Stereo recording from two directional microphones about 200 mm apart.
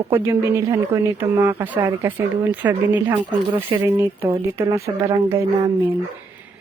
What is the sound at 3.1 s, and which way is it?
Speech, 25° right (ahead or behind).